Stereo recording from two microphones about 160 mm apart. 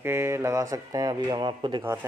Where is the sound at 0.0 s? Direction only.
15° right (ahead or behind).